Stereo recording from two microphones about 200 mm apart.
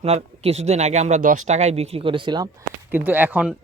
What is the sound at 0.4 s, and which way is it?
Speech, 35° right (ahead or behind).